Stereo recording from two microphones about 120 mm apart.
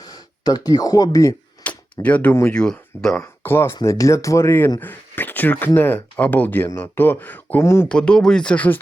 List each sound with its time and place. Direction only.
0.4 s speech: 30° left (ahead or behind)
1.6 s a sound: 10° left (ahead or behind)
2.5 s speech: 5° left (ahead or behind)
3.2 s speech: 20° left (ahead or behind)
7.9 s speech: 5° left (ahead or behind)